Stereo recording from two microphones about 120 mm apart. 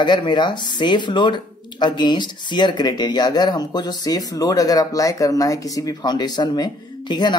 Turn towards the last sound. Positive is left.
turn(degrees=40)  # may be behind; listen again after turning